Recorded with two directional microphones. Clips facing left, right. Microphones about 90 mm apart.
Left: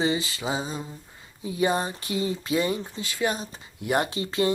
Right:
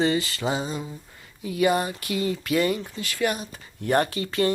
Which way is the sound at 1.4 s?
25° left (ahead or behind).